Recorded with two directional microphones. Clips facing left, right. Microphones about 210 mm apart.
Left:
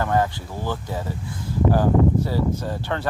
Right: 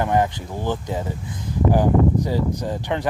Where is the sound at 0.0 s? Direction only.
20° right (ahead or behind).